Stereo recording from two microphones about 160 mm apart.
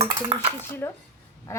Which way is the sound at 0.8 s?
15° left (ahead or behind).